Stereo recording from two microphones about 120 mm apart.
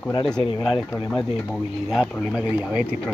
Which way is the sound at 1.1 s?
Centre (ahead or behind).